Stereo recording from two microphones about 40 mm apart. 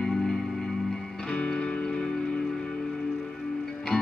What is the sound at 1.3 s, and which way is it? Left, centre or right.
Music, left.